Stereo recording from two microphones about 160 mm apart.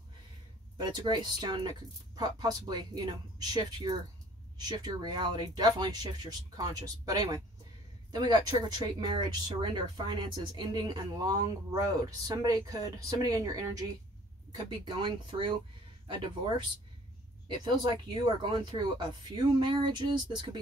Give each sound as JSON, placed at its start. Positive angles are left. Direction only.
{"t": 0.7, "sound": "speech", "side_deg": -25}